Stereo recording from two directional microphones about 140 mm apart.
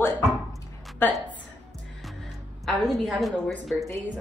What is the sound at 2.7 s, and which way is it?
Speech, centre (ahead or behind).